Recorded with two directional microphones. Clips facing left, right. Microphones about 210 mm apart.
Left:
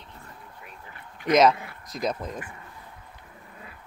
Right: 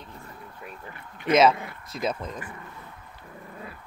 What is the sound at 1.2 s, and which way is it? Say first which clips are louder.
Dog: even; 20° right (ahead or behind).